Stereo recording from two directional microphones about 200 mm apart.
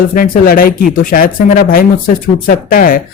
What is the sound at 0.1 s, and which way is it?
Speech, 45° left (ahead or behind).